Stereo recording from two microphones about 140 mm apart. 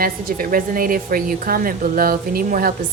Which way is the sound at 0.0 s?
90° right.